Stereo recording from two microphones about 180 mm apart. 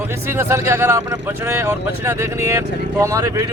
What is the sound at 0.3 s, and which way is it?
Speech, 15° right (ahead or behind).